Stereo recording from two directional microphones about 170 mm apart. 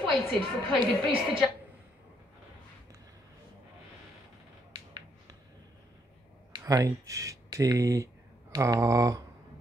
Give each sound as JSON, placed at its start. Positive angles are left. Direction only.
{"t": 0.0, "sound": "a woman's voice", "side_deg": 0}
{"t": 6.5, "sound": "speech", "side_deg": -20}